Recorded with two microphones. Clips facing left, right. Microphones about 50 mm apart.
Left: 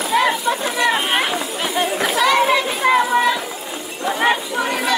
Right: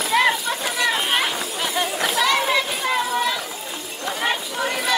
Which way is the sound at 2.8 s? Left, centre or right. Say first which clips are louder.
Left 7 dB; left.